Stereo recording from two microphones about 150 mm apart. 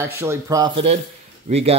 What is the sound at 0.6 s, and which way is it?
Speech, 35° right (ahead or behind).